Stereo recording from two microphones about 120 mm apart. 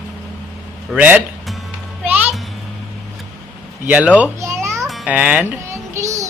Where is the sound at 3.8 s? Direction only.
10° right (ahead or behind).